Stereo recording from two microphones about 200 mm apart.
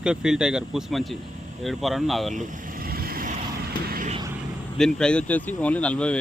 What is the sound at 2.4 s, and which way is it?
Vehicle, 40° right (ahead or behind).